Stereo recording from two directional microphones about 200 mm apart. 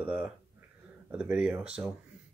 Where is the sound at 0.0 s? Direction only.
10° right (ahead or behind).